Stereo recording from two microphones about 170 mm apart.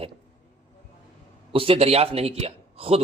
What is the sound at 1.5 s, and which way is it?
A man's voice, 35° right (ahead or behind).